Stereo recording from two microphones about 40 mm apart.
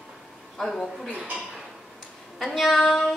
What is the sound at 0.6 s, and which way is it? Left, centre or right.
Speech, centre.